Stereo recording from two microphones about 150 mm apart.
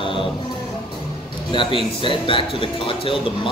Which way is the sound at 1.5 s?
35° left (ahead or behind).